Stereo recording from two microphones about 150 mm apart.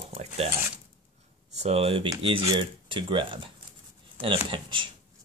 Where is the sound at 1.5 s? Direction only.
45° right (ahead or behind).